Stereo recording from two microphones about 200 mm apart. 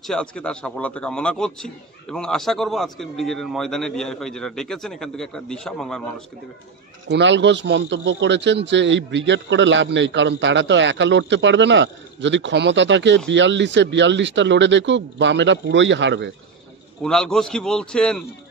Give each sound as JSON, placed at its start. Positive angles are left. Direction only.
{"t": 0.0, "sound": "a man's voice", "side_deg": 5}
{"t": 7.1, "sound": "a man's voice", "side_deg": -60}
{"t": 17.0, "sound": "a man's voice", "side_deg": 5}